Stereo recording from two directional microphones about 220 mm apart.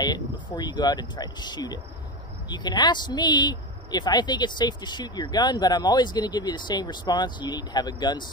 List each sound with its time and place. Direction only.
0.0 s a woman's voice: 20° left (ahead or behind)